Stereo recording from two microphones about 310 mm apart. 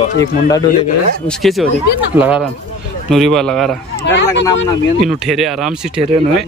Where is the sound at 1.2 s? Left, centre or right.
Centre.